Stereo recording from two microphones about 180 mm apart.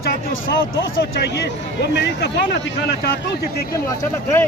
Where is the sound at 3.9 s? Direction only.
20° left (ahead or behind).